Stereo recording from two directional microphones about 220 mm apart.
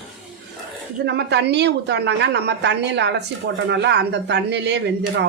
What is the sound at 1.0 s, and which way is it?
Speech, 50° right (ahead or behind).